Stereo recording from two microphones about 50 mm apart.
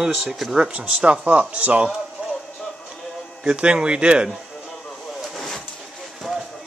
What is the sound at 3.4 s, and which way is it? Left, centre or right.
Speech, centre.